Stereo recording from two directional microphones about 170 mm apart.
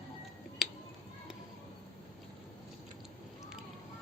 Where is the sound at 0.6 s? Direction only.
Centre (ahead or behind).